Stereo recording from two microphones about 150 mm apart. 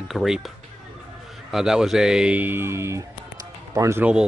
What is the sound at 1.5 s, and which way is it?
A man's voice, 5° right (ahead or behind).